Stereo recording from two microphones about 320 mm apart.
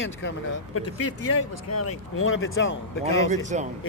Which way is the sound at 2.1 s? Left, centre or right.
Left.